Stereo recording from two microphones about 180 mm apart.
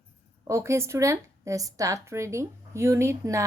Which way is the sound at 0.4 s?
15° right (ahead or behind).